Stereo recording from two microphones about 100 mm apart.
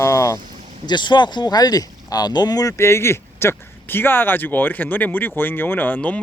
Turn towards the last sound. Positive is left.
turn(degrees=15)  # may be behind; listen again after turning